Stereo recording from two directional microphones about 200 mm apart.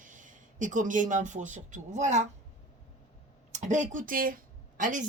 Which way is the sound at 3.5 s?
35° right (ahead or behind).